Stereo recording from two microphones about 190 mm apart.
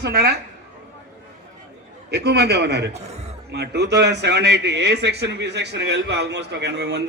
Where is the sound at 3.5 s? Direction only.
60° right (ahead or behind).